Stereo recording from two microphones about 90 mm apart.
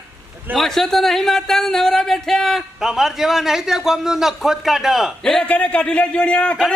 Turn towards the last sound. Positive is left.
turn(degrees=10)  # may be behind; listen again after turning